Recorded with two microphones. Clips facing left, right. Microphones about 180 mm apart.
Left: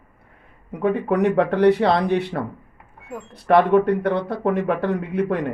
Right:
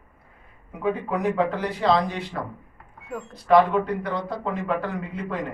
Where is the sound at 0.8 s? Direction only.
70° left (ahead or behind).